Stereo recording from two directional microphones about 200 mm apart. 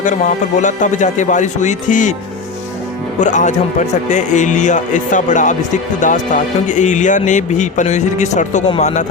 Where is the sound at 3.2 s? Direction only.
35° left (ahead or behind).